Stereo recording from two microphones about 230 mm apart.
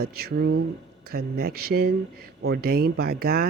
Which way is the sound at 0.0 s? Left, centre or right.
Right.